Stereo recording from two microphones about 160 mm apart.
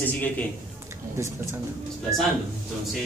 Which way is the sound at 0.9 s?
15° right (ahead or behind).